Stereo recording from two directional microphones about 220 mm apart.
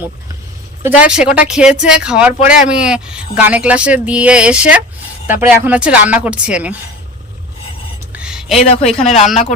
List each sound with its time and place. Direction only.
0.8 s speech: 5° right (ahead or behind)
8.1 s a sound: 5° right (ahead or behind)
8.8 s speech: 30° left (ahead or behind)